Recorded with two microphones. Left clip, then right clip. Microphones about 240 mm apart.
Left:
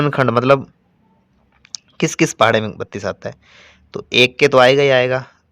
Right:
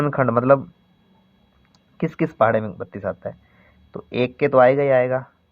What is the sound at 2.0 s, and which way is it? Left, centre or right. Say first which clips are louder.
Speech: left 5 dB; left.